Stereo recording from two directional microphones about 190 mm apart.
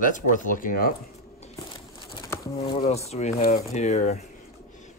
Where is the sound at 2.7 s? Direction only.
35° left (ahead or behind).